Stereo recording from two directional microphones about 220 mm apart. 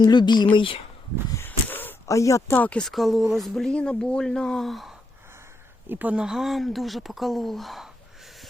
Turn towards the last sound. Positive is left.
turn(degrees=0)  # may be behind; listen again after turning